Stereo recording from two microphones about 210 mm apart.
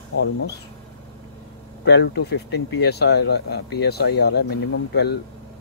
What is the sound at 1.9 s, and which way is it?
Speech, 55° left (ahead or behind).